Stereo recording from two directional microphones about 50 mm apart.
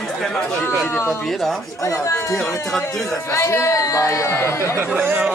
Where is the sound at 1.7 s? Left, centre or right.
Left.